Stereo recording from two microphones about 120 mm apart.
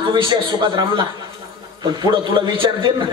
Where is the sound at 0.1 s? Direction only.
40° right (ahead or behind).